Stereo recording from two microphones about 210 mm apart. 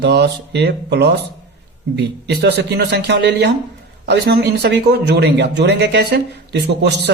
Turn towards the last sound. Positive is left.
turn(degrees=-55)  # may be behind; listen again after turning